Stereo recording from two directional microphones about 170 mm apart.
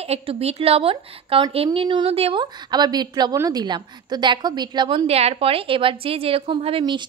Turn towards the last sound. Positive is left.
turn(degrees=-30)  # may be behind; listen again after turning